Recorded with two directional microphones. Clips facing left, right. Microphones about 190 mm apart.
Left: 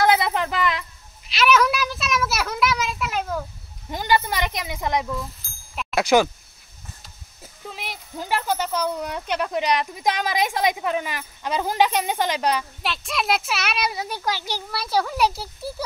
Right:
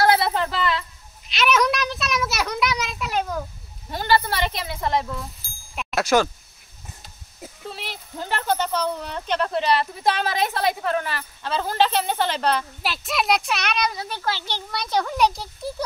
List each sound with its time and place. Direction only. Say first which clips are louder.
0.0 s a sound: even; 15° left (ahead or behind)
1.2 s a sound: left 2 dB; centre (ahead or behind)
3.9 s speech: even; 15° left (ahead or behind)
5.4 s bicycle bell: right 1 dB; 5° right (ahead or behind)
5.9 s speech: left 2 dB; 10° left (ahead or behind)
7.7 s speech: left 1 dB; 10° left (ahead or behind)
12.8 s a child's voice: right 2 dB; centre (ahead or behind)